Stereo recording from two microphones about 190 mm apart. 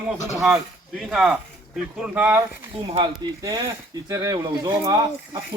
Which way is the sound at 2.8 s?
25° right (ahead or behind).